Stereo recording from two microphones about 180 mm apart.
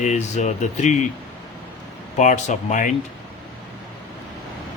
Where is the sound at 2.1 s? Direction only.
40° left (ahead or behind).